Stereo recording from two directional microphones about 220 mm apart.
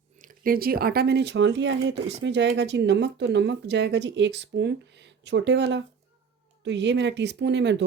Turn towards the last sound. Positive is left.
turn(degrees=-50)  # may be behind; listen again after turning